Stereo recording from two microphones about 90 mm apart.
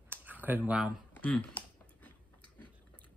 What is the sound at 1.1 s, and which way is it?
Typing, 15° left (ahead or behind).